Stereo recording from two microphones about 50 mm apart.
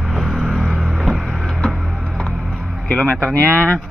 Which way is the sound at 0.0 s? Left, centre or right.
Centre.